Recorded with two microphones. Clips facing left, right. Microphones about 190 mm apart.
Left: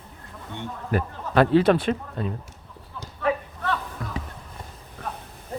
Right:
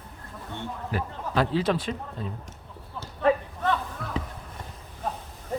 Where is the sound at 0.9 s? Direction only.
60° left (ahead or behind).